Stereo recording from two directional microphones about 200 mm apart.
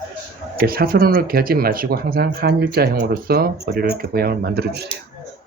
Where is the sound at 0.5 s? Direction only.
50° right (ahead or behind).